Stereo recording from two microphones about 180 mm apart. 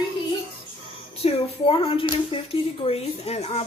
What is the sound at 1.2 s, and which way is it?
Speech, 30° left (ahead or behind).